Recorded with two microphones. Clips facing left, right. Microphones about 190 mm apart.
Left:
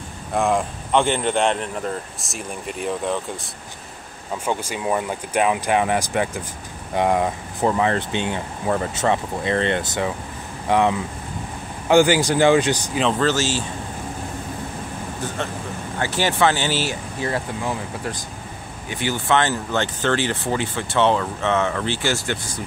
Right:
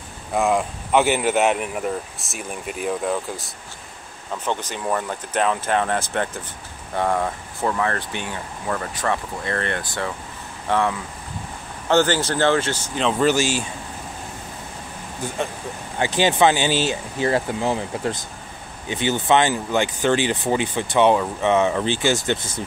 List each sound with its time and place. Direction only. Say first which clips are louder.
0.3 s speech: even; centre (ahead or behind)
4.5 s speech: left 1 dB; 10° left (ahead or behind)
13.2 s speech: right 2 dB; 15° right (ahead or behind)
16.0 s speech: right 2 dB; 15° right (ahead or behind)